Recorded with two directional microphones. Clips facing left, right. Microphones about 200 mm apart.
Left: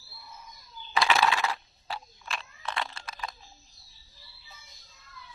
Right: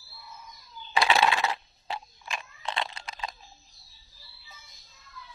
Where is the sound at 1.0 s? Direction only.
25° right (ahead or behind).